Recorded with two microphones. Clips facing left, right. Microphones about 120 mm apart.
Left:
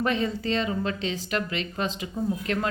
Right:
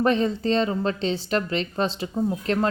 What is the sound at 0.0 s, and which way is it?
A woman's voice, 35° right (ahead or behind).